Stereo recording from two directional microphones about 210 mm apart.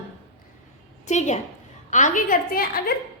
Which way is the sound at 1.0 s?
35° left (ahead or behind).